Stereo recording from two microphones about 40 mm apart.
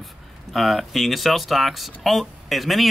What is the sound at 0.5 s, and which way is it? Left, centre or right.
Speech, centre.